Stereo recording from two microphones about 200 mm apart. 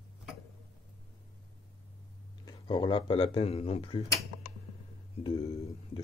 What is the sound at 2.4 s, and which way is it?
Speech, 20° left (ahead or behind).